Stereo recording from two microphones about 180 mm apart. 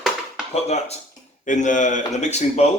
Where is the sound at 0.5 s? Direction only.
35° left (ahead or behind).